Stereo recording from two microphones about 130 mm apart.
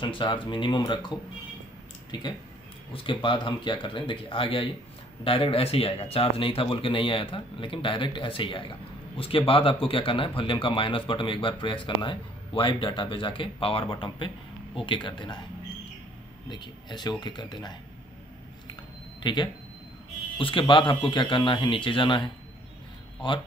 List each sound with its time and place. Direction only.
0.0 s speech: 40° left (ahead or behind)
16.4 s speech: 35° left (ahead or behind)
19.2 s speech: 35° left (ahead or behind)